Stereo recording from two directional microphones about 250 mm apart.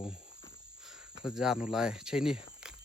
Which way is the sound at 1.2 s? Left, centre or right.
Centre.